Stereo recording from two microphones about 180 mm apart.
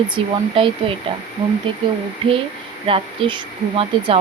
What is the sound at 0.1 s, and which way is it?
Speech, 30° right (ahead or behind).